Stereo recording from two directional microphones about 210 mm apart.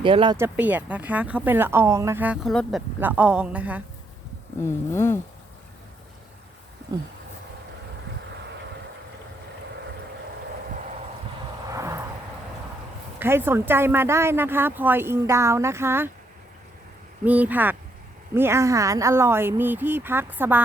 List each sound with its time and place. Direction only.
0.0 s speech: 25° right (ahead or behind)
0.3 s speech: 10° right (ahead or behind)
4.6 s speech: 10° left (ahead or behind)
11.7 s a sound: 15° right (ahead or behind)
13.1 s speech: 10° right (ahead or behind)
17.2 s speech: 5° right (ahead or behind)